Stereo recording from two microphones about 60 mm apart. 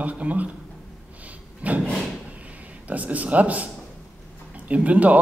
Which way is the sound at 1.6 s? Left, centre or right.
Right.